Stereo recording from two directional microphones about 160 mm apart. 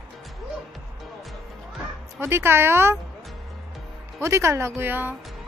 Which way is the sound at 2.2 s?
15° right (ahead or behind).